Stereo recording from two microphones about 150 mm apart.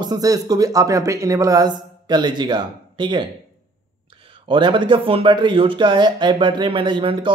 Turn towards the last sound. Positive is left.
turn(degrees=-35)  # may be behind; listen again after turning